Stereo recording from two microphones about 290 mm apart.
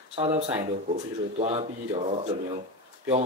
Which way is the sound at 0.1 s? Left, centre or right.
Right.